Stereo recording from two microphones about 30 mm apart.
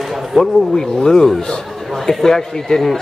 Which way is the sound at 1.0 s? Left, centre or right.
Centre.